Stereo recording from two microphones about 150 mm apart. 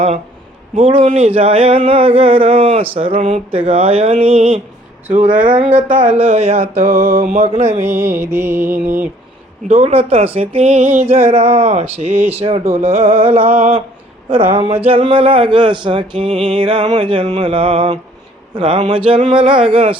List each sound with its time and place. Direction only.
0.8 s music: 40° right (ahead or behind)
5.1 s a sound: 60° right (ahead or behind)
6.1 s speech: 45° right (ahead or behind)
6.9 s a sound: 70° right (ahead or behind)
7.3 s speech: 50° right (ahead or behind)
7.8 s mantra: 15° right (ahead or behind)
9.6 s speech: 45° right (ahead or behind)
12.1 s mantra: 15° right (ahead or behind)
12.4 s music: 40° right (ahead or behind)
14.8 s music: 35° right (ahead or behind)